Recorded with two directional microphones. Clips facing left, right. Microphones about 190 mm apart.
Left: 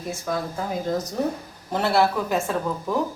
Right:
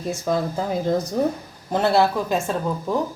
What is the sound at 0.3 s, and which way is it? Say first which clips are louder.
Speech: right 5 dB; 25° right (ahead or behind).